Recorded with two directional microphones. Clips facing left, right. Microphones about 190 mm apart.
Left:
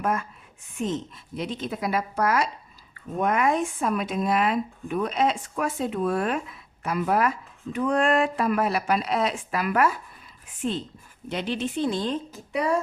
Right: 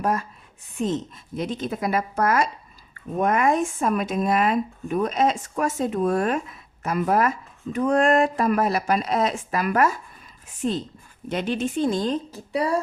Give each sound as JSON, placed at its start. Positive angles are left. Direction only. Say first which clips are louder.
{"t": 0.0, "sound": "speech", "louder": "right 2 dB", "side_deg": -35}